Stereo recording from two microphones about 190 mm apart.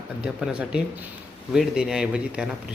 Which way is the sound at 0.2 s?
5° right (ahead or behind).